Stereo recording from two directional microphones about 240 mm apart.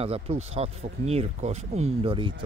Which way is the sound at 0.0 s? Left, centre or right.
Right.